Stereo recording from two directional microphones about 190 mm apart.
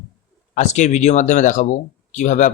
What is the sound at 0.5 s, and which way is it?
Speech, 40° left (ahead or behind).